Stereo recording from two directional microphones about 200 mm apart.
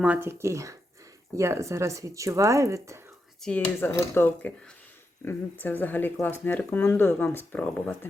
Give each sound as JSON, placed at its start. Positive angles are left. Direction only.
{"t": 0.0, "sound": "speech", "side_deg": -10}
{"t": 3.4, "sound": "speech", "side_deg": 10}